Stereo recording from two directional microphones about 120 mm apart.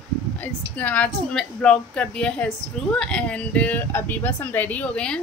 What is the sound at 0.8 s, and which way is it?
Speech, 10° left (ahead or behind).